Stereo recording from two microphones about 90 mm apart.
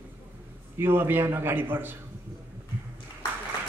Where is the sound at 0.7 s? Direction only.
25° right (ahead or behind).